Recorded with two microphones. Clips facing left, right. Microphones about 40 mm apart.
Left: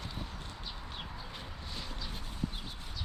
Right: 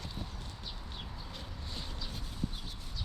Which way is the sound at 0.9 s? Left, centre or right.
Left.